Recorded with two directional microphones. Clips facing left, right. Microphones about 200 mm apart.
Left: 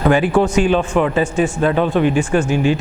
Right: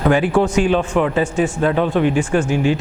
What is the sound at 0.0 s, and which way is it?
A man's voice, 15° left (ahead or behind).